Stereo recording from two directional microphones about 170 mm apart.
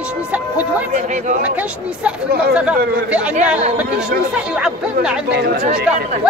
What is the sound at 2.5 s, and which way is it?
Speech, 5° right (ahead or behind).